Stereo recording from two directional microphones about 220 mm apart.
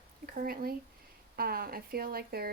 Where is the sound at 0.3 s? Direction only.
45° right (ahead or behind).